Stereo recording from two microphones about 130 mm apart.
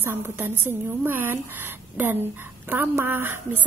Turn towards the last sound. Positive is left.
turn(degrees=-15)  # may be behind; listen again after turning